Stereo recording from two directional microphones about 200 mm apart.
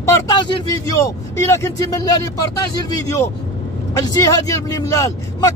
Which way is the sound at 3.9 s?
20° left (ahead or behind).